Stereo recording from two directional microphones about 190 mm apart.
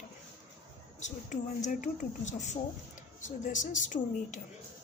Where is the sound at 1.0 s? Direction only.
40° left (ahead or behind).